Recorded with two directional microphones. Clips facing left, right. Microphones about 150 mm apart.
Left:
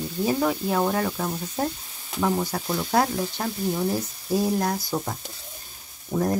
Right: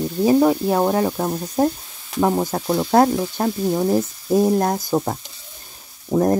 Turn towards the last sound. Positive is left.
turn(degrees=-45)  # may be behind; listen again after turning